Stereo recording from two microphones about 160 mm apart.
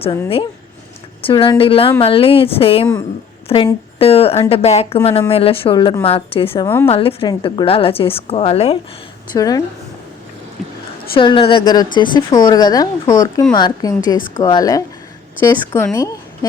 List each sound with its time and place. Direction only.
1.2 s a woman's voice: 35° left (ahead or behind)
9.3 s speech: 20° left (ahead or behind)
11.1 s a woman's voice: 30° left (ahead or behind)